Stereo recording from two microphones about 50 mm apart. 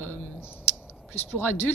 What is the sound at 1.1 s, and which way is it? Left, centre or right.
Speech, left.